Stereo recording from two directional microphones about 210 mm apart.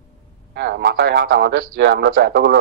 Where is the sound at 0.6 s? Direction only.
50° right (ahead or behind).